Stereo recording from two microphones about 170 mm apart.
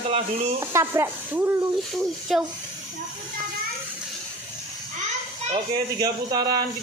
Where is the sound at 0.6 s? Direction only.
15° right (ahead or behind).